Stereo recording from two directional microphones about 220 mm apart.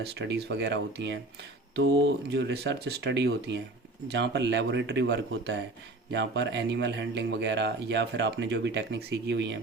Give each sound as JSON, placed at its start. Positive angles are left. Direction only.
{"t": 0.0, "sound": "speech", "side_deg": -45}